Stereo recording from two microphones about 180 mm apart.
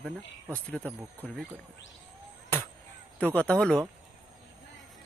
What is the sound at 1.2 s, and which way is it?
Speech, centre (ahead or behind).